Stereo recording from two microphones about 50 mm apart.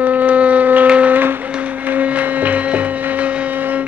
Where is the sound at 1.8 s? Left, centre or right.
Right.